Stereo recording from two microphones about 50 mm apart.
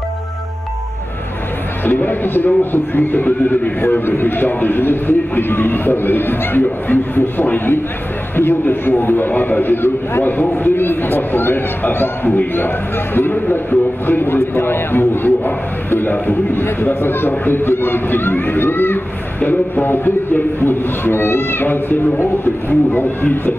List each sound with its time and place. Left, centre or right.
1.9 s speech: left